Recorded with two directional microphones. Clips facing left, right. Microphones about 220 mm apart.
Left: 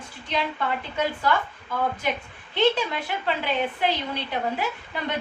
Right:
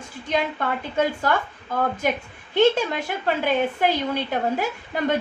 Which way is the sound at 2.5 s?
45° right (ahead or behind).